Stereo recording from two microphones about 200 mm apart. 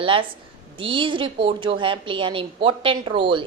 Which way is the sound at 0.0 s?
25° right (ahead or behind).